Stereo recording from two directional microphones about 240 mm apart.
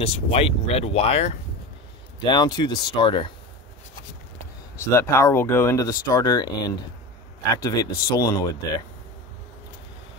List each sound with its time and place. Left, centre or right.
0.0 s speech: left
4.7 s speech: centre